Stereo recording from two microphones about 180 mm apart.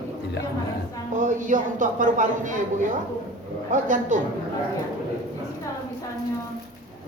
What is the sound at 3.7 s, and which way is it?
Speech, 45° right (ahead or behind).